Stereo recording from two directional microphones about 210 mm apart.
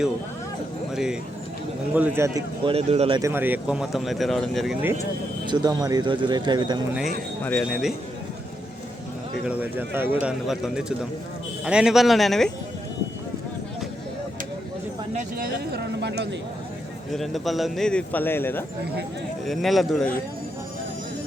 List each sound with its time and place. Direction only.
0.9 s speech: 5° right (ahead or behind)
2.7 s speech: 30° right (ahead or behind)
3.2 s speech: 10° right (ahead or behind)
5.5 s speech: 20° right (ahead or behind)
7.4 s speech: 5° left (ahead or behind)
9.5 s speech: 10° right (ahead or behind)
15.1 s speech: 45° right (ahead or behind)
17.1 s speech: centre (ahead or behind)